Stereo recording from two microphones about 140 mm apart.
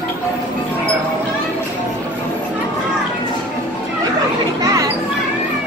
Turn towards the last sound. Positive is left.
turn(degrees=-25)  # may be behind; listen again after turning